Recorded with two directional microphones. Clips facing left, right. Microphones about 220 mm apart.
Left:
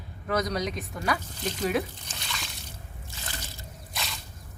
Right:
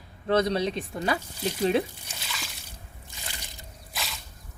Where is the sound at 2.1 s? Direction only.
5° right (ahead or behind).